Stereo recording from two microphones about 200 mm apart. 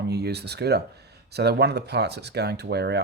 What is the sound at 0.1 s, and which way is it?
Speech, 55° right (ahead or behind).